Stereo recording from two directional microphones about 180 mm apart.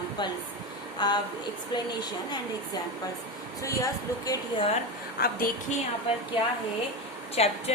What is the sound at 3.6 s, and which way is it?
Speech, 15° left (ahead or behind).